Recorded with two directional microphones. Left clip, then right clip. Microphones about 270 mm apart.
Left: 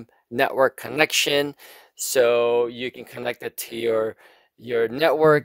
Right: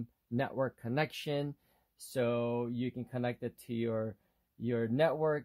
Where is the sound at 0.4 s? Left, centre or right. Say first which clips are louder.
Left 16 dB; left.